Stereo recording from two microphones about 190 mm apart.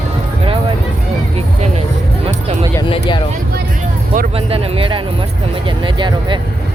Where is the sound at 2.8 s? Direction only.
25° left (ahead or behind).